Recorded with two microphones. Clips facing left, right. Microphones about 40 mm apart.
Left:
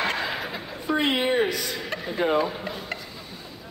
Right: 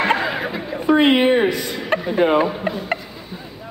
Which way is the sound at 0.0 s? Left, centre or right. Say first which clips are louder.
Right 8 dB; right.